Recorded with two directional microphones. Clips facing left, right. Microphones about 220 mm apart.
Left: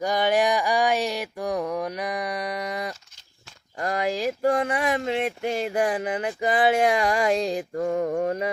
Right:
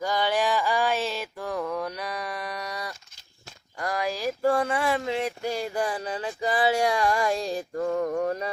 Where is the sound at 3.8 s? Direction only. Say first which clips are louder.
Left 3 dB; 25° left (ahead or behind).